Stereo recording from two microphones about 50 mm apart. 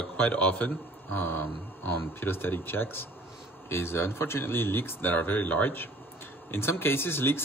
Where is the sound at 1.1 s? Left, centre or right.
Left.